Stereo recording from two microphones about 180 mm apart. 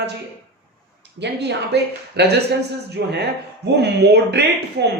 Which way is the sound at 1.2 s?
70° right (ahead or behind).